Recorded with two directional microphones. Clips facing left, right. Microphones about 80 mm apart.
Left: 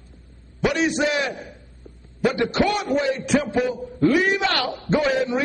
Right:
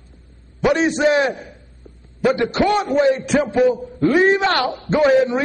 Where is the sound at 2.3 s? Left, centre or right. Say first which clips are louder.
Right 4 dB; right.